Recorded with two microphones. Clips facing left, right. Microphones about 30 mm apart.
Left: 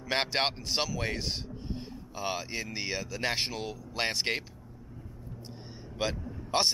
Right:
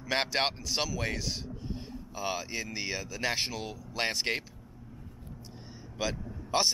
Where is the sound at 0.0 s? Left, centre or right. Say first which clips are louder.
Even; centre.